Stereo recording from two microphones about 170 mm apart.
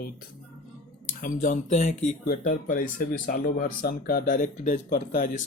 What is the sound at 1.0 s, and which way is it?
A man's voice, 50° left (ahead or behind).